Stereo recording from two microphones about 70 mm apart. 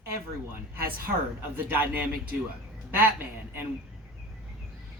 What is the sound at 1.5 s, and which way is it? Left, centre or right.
Speech, right.